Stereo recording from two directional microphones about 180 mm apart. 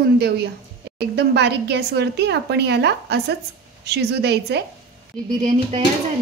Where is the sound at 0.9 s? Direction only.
65° right (ahead or behind).